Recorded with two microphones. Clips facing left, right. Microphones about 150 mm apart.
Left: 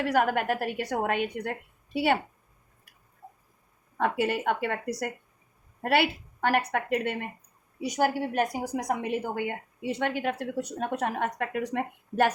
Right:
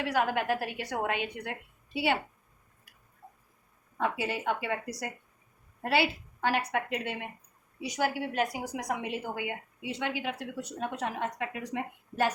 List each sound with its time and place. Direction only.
0.0 s a woman's voice: 50° left (ahead or behind)
3.9 s a woman's voice: 60° left (ahead or behind)